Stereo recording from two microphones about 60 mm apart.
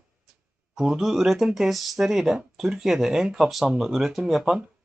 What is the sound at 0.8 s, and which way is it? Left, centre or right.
Speech, centre.